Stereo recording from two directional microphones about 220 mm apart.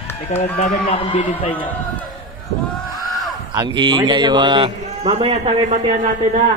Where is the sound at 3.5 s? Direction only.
20° right (ahead or behind).